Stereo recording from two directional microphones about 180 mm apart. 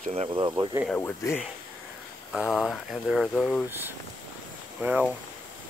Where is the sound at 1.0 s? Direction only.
10° left (ahead or behind).